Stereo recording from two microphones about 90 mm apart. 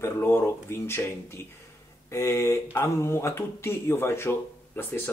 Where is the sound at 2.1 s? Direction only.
30° left (ahead or behind).